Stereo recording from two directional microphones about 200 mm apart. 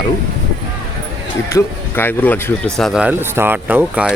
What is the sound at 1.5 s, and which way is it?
Speech, 10° left (ahead or behind).